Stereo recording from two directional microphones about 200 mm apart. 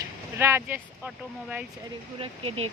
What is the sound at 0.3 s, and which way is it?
Speech, 10° right (ahead or behind).